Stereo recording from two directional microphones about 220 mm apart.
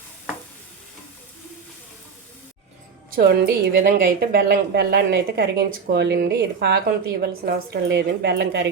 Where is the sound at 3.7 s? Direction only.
40° right (ahead or behind).